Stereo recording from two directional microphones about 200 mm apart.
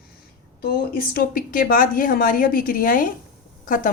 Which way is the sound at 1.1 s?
45° left (ahead or behind).